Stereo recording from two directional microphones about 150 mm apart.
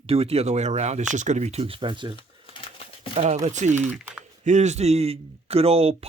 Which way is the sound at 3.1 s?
50° right (ahead or behind).